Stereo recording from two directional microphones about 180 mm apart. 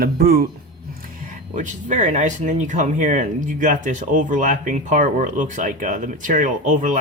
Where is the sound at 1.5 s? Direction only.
45° right (ahead or behind).